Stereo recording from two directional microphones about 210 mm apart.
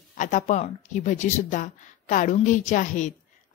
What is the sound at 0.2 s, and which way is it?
A woman's voice, 35° left (ahead or behind).